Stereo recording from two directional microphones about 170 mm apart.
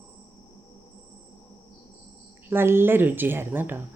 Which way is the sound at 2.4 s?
15° right (ahead or behind).